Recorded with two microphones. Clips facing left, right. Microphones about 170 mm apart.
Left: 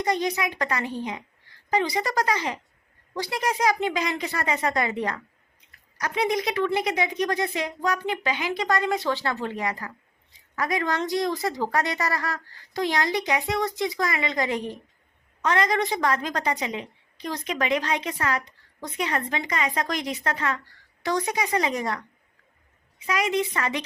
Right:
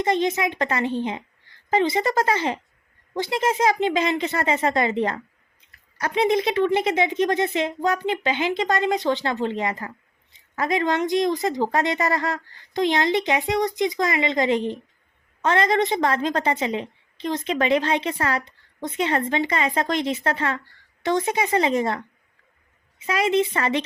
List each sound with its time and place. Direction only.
0.0 s a woman's voice: 25° right (ahead or behind)